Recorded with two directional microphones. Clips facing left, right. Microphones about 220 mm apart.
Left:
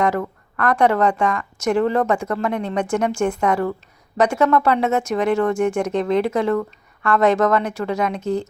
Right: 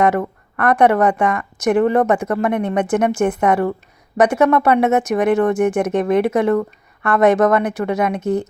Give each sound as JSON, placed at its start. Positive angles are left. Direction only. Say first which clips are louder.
{"t": 0.6, "sound": "speech", "louder": "right 3 dB", "side_deg": -20}